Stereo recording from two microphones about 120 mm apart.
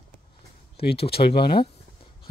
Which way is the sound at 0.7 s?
55° left (ahead or behind).